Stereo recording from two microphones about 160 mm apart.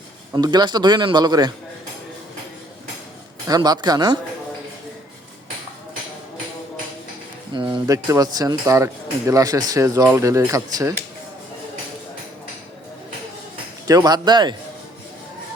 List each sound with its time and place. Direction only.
0.3 s speech: 25° right (ahead or behind)
3.4 s speech: 25° right (ahead or behind)
7.5 s speech: 30° right (ahead or behind)
13.8 s speech: 25° right (ahead or behind)